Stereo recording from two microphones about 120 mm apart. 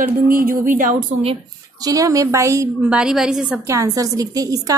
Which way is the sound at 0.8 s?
90° right.